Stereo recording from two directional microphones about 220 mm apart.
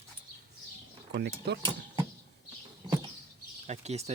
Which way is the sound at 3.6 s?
30° right (ahead or behind).